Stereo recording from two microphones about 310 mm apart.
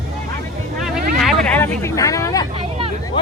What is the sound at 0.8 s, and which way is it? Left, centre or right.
Speech, centre.